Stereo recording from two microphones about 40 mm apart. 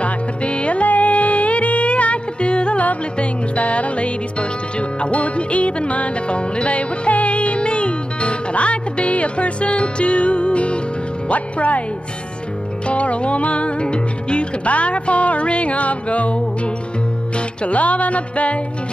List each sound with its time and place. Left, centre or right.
0.0 s music: left
2.8 s music: left
11.2 s speech: left
12.8 s music: left
17.6 s music: left